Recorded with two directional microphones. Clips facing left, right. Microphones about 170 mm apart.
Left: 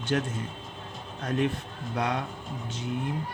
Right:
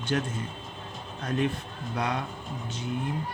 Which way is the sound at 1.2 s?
75° left (ahead or behind).